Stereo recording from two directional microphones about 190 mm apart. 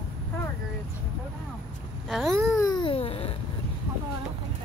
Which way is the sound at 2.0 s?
Centre (ahead or behind).